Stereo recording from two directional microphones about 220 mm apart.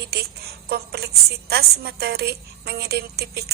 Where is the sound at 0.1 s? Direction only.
45° right (ahead or behind).